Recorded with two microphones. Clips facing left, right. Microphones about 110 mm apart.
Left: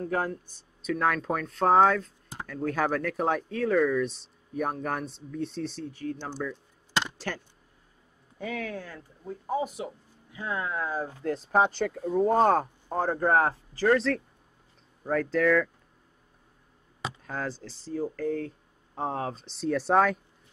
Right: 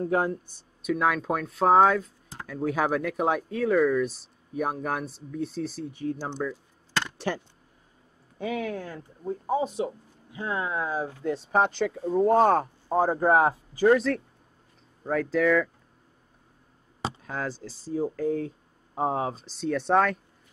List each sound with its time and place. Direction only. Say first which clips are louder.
0.0 s speech: right 4 dB; 20° right (ahead or behind)
0.8 s speech: right 2 dB; 5° right (ahead or behind)
5.9 s speech: right 3 dB; 20° right (ahead or behind)
6.9 s chop: left 1 dB; 15° left (ahead or behind)
7.2 s speech: right 5 dB; 15° right (ahead or behind)
11.0 s speech: right 2 dB; centre (ahead or behind)
12.8 s speech: right 4 dB; 10° right (ahead or behind)
15.0 s speech: right 1 dB; 5° right (ahead or behind)
17.2 s speech: right 1 dB; centre (ahead or behind)